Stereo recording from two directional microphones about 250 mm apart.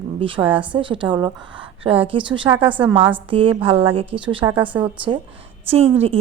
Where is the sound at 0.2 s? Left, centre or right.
Right.